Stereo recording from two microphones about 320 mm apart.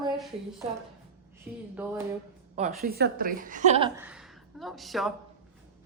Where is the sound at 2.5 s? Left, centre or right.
Right.